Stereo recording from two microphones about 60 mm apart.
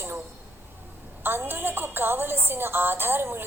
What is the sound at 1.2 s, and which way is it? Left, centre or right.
A woman's voice, right.